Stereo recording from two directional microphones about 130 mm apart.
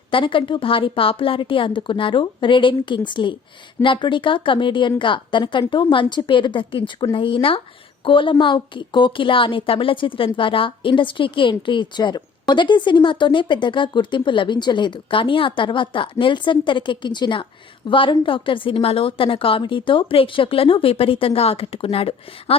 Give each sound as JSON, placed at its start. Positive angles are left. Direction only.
{"t": 0.1, "sound": "a woman's voice", "side_deg": 40}